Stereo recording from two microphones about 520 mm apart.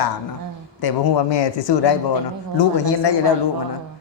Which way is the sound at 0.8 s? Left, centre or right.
Left.